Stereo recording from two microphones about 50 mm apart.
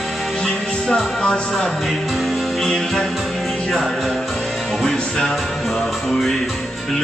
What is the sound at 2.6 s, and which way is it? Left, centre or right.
Music, centre.